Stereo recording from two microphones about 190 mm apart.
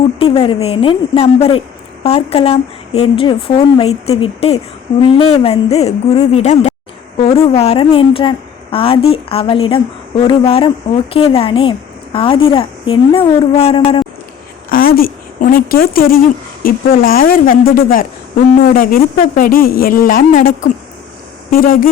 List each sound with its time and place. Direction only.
0.2 s a woman's voice: 30° left (ahead or behind)
14.7 s a woman's voice: 50° left (ahead or behind)